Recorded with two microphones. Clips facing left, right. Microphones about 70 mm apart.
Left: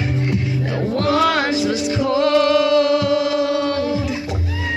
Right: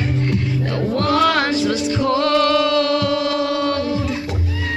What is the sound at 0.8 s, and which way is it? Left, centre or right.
Music, centre.